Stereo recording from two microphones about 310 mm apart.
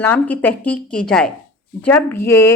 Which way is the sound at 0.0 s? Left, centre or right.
Centre.